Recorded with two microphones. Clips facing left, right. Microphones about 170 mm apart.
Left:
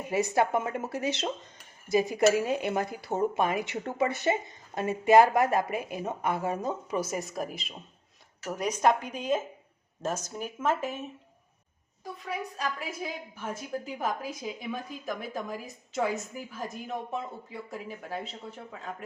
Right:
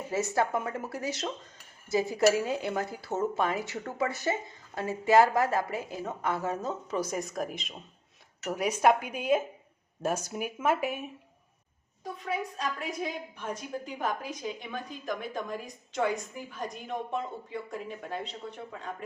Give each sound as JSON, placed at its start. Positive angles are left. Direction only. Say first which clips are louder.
{"t": 0.1, "sound": "speech", "louder": "left 3 dB", "side_deg": 15}
{"t": 12.0, "sound": "a woman's voice", "louder": "right 2 dB", "side_deg": 0}